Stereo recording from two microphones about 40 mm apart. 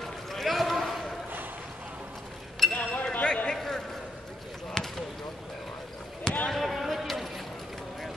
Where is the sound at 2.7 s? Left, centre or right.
Left.